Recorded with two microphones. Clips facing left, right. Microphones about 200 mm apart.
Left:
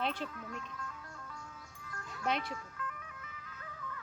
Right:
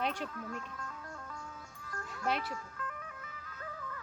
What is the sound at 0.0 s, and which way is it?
Speech, 45° right (ahead or behind).